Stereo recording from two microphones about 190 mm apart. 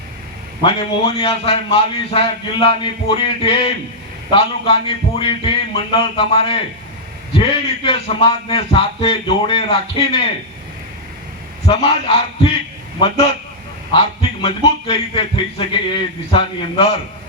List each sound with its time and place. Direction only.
0.6 s speech: 25° left (ahead or behind)
11.7 s speech: 30° left (ahead or behind)
13.9 s speech: 25° left (ahead or behind)